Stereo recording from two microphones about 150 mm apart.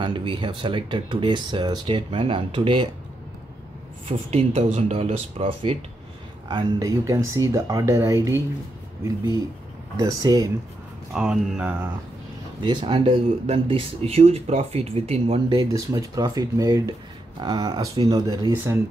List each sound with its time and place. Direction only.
0.0 s speech: 35° right (ahead or behind)
4.1 s speech: 45° right (ahead or behind)
6.5 s speech: 20° right (ahead or behind)
9.9 s speech: 25° right (ahead or behind)
11.1 s speech: 5° right (ahead or behind)
12.6 s speech: 35° right (ahead or behind)
15.5 s speech: 20° right (ahead or behind)
18.5 s speech: 15° right (ahead or behind)